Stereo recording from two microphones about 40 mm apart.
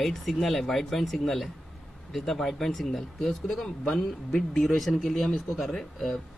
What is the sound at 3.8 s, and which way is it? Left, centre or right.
Speech, centre.